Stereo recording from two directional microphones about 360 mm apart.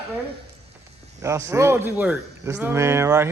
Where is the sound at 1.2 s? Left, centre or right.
Centre.